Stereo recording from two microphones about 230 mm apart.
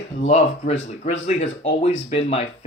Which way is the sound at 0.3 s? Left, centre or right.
Left.